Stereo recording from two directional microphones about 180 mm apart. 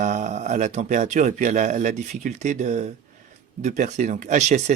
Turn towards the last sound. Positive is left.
turn(degrees=-40)  # may be behind; listen again after turning